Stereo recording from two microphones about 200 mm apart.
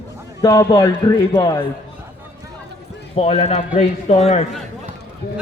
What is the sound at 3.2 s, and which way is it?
Speech, 35° left (ahead or behind).